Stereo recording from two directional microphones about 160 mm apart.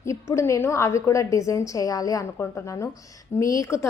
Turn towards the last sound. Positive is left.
turn(degrees=20)  # may be behind; listen again after turning